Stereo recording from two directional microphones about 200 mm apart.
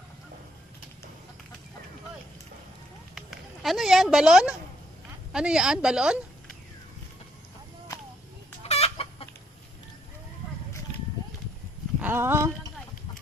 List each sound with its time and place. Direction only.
3.2 s a woman's voice: centre (ahead or behind)
8.6 s chicken: 30° left (ahead or behind)
11.9 s a sound: 10° right (ahead or behind)